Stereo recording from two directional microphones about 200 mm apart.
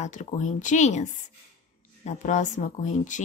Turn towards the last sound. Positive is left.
turn(degrees=40)  # may be behind; listen again after turning